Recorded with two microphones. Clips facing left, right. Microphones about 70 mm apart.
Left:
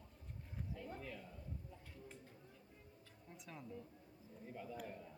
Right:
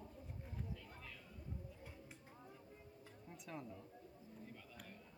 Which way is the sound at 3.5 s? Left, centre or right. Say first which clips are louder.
Right 5 dB; centre.